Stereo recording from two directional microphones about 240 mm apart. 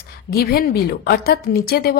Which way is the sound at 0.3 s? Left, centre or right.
Left.